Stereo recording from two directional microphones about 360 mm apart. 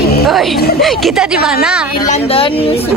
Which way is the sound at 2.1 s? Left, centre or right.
Centre.